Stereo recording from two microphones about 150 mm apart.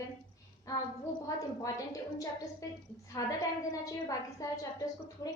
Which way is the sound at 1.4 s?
25° left (ahead or behind).